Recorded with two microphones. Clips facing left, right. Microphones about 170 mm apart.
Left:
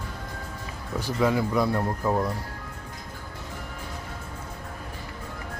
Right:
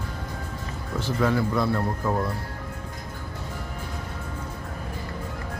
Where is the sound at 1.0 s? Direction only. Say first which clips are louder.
Even; 10° left (ahead or behind).